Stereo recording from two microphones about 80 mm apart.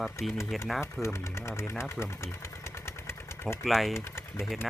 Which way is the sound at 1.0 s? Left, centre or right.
Left.